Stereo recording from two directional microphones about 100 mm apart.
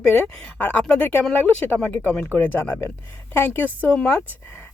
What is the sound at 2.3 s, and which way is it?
Speech, 20° left (ahead or behind).